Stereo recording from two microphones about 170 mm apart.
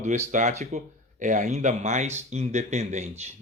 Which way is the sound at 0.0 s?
45° right (ahead or behind).